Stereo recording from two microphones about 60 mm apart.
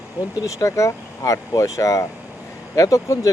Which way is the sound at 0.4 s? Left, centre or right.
Left.